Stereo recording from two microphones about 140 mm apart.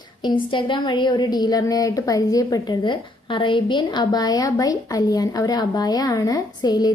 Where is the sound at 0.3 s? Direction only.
35° left (ahead or behind).